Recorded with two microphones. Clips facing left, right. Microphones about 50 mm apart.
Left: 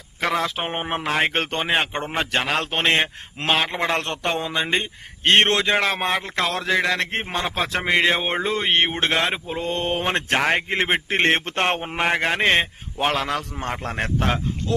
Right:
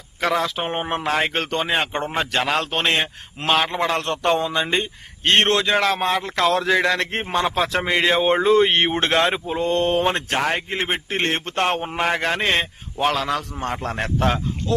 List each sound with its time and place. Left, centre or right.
0.2 s a man's voice: centre; by 3.1 s left
3.4 s a man's voice: centre
3.8 s a man's voice: left
4.2 s a man's voice: centre
6.2 s a man's voice: centre
10.2 s a man's voice: left; by 14.0 s centre